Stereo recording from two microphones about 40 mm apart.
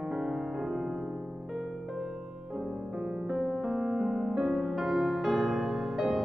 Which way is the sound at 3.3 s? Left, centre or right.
Centre.